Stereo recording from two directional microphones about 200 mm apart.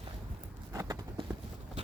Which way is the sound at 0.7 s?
15° right (ahead or behind).